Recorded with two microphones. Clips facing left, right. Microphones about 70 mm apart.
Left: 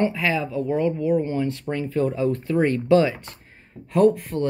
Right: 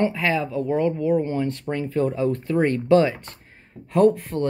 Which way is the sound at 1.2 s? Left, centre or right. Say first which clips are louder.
Even; right.